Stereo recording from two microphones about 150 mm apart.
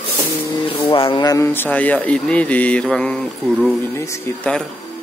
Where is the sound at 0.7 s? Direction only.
35° left (ahead or behind); by 3.3 s 5° left (ahead or behind).